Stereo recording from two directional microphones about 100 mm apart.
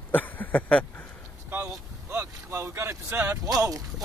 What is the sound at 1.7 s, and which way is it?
Vehicle, 30° right (ahead or behind).